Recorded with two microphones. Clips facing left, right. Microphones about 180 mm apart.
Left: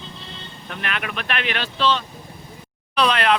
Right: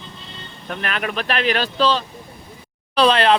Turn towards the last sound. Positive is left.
turn(degrees=-30)  # may be behind; listen again after turning